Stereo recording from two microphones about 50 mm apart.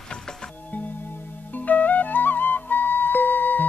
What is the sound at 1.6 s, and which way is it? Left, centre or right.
Music, left.